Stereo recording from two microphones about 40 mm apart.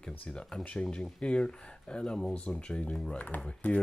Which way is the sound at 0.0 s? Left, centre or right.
Left.